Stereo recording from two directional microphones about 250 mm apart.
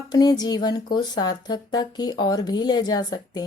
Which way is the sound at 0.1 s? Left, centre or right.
Centre.